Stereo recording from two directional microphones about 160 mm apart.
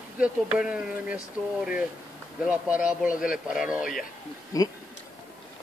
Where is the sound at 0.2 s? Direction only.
5° right (ahead or behind).